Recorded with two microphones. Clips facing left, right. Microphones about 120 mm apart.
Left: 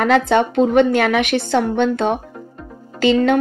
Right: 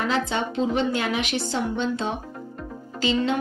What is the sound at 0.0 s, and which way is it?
Speech, 60° left (ahead or behind).